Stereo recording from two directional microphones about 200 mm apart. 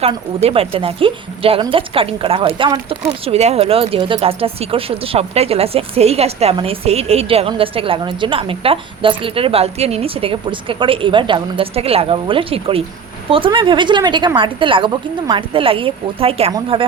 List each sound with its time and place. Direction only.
0.4 s speech: 30° right (ahead or behind)